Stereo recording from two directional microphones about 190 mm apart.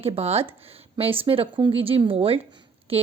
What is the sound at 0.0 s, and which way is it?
A woman's voice, 30° right (ahead or behind).